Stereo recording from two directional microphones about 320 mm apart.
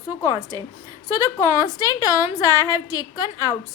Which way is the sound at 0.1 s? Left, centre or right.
Centre.